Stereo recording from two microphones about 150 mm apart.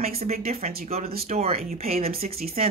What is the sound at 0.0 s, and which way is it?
Speech, 45° right (ahead or behind).